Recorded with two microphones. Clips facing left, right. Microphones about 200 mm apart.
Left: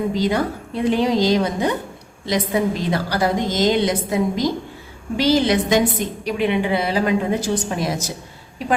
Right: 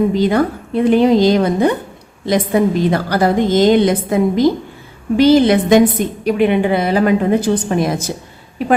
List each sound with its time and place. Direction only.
0.1 s a woman's voice: 55° right (ahead or behind)